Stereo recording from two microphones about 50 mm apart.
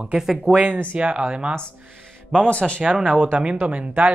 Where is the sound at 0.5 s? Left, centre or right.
Right.